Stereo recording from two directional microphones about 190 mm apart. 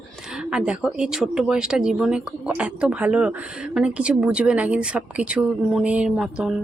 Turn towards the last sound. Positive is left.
turn(degrees=-5)  # may be behind; listen again after turning